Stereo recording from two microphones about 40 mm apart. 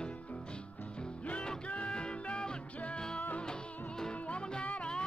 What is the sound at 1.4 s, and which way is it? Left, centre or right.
Music, left.